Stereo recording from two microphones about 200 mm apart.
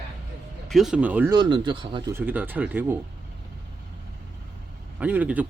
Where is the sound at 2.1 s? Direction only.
10° right (ahead or behind).